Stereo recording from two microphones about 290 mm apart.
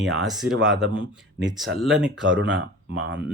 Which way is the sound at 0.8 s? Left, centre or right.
Right.